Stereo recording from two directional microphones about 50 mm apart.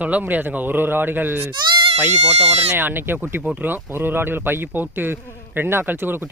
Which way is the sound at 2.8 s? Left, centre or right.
Right.